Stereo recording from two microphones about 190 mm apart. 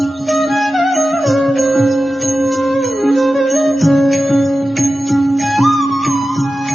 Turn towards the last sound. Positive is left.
turn(degrees=0)  # may be behind; listen again after turning